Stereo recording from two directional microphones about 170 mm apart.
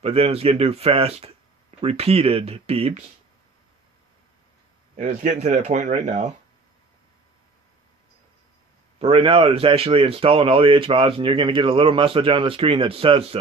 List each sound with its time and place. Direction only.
0.0 s speech: 35° right (ahead or behind)
4.9 s speech: 45° right (ahead or behind)
9.0 s speech: 35° right (ahead or behind)